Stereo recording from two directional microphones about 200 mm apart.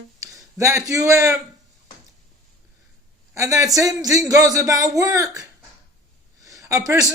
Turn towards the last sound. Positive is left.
turn(degrees=-15)  # may be behind; listen again after turning